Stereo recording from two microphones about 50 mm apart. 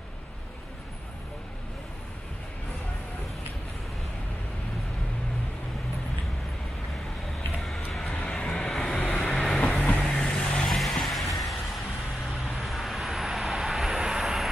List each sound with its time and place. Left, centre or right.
8.0 s vehicle: left
9.6 s vehicle: left
10.0 s vehicle: centre
10.7 s vehicle: centre